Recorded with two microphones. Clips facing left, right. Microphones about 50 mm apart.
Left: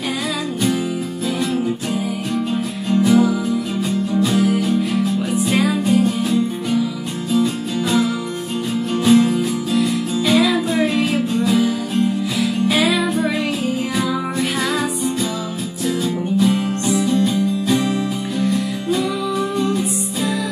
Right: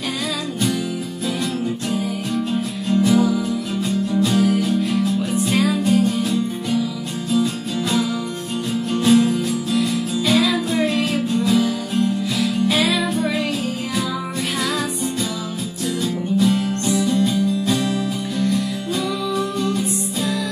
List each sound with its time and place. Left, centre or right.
2.0 s music: centre
8.9 s music: centre
16.0 s music: centre